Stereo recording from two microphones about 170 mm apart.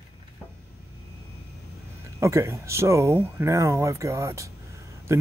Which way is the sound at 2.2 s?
15° right (ahead or behind).